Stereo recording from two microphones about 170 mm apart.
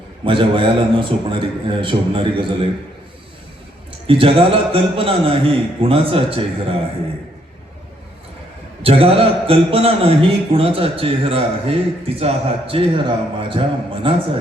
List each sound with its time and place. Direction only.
0.3 s speech: 30° right (ahead or behind)
4.0 s speech: 30° right (ahead or behind)
8.8 s speech: 35° right (ahead or behind)